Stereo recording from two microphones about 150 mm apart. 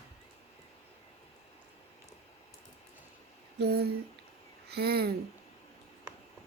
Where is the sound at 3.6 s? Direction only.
90° right.